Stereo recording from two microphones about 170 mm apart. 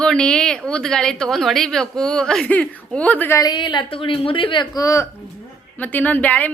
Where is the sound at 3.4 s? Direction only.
25° left (ahead or behind).